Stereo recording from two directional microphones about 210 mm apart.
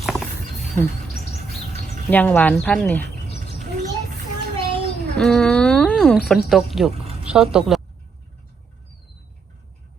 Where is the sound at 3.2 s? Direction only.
30° left (ahead or behind).